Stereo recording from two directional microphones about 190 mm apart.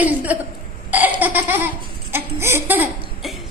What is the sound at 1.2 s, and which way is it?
Laughter, 10° right (ahead or behind).